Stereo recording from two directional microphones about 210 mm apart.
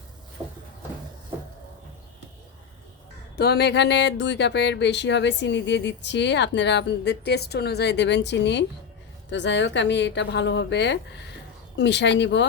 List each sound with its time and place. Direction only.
3.3 s speech: 50° left (ahead or behind)